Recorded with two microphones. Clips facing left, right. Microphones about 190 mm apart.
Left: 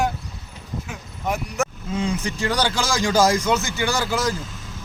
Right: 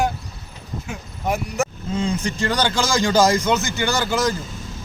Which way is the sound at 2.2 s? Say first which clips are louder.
Right 1 dB; 5° left (ahead or behind).